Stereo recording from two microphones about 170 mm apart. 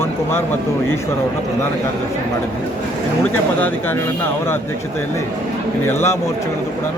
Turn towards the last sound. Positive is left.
turn(degrees=15)  # may be behind; listen again after turning